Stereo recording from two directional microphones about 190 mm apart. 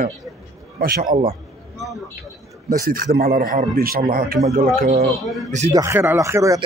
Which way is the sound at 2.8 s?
50° right (ahead or behind).